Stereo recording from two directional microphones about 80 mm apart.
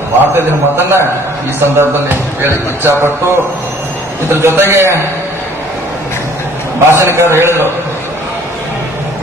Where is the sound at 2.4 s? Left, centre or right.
Right.